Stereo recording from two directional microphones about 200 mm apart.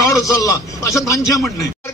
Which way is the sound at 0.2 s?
15° left (ahead or behind).